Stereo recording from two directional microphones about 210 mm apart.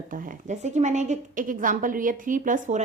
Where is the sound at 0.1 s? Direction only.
40° right (ahead or behind).